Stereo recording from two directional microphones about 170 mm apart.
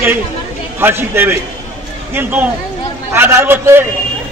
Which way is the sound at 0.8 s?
15° right (ahead or behind).